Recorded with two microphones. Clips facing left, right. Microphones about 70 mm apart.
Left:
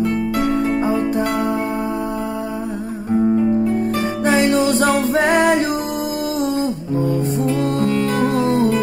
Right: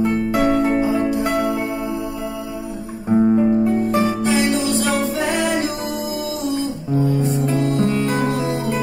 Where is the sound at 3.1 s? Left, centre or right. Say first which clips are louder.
Right 1 dB; centre.